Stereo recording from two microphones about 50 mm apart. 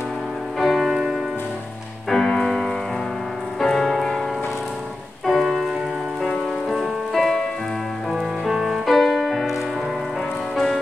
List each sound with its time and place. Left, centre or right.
0.6 s music: centre
2.0 s music: centre
5.2 s music: centre
6.7 s music: centre
10.5 s music: centre